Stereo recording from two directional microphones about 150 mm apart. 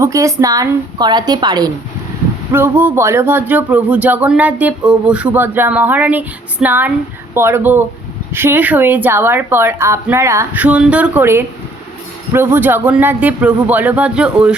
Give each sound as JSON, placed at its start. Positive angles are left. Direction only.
{"t": 0.0, "sound": "a woman's voice", "side_deg": -20}
{"t": 2.5, "sound": "speech", "side_deg": -15}